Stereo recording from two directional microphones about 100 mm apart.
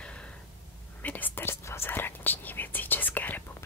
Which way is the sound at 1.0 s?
20° left (ahead or behind).